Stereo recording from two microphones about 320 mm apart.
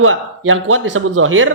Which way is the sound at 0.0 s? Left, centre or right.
Right.